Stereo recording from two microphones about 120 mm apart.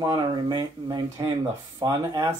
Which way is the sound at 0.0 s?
35° right (ahead or behind).